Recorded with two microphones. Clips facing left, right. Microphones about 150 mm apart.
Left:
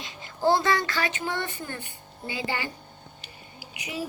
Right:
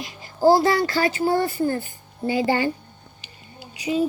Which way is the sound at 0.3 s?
35° right (ahead or behind).